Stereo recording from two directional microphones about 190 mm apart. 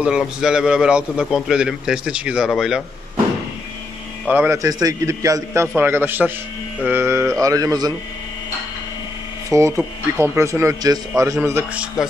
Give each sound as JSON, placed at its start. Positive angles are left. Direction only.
{"t": 0.0, "sound": "a man's voice", "side_deg": -5}
{"t": 4.3, "sound": "speech", "side_deg": -10}
{"t": 9.5, "sound": "speech", "side_deg": -15}